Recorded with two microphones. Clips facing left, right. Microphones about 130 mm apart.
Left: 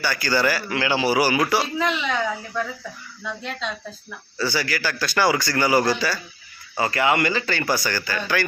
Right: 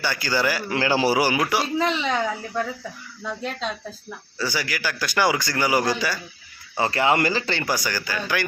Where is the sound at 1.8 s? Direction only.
35° right (ahead or behind).